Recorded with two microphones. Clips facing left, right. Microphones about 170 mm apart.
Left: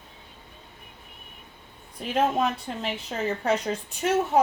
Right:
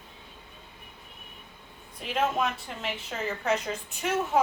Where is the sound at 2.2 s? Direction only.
35° left (ahead or behind).